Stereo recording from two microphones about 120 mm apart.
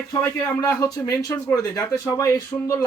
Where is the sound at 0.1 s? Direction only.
25° left (ahead or behind).